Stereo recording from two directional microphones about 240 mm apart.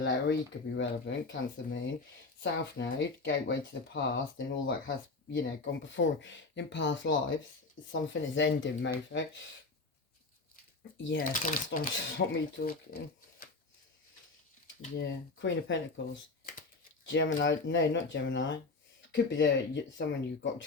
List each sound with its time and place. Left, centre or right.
0.0 s speech: left
10.9 s speech: left
11.2 s speech: left
12.0 s speech: left
14.8 s speech: left
17.4 s speech: left